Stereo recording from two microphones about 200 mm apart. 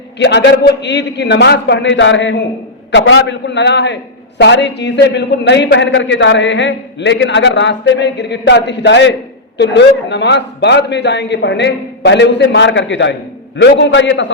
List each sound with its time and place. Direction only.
0.2 s a man's voice: 60° left (ahead or behind)